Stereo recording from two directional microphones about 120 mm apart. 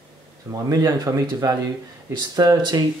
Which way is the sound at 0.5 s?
30° right (ahead or behind).